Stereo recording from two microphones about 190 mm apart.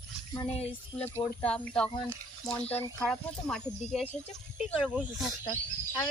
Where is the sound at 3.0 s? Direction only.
5° left (ahead or behind).